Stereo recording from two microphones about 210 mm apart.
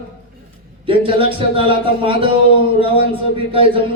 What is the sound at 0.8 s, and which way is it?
A man's voice, 25° right (ahead or behind).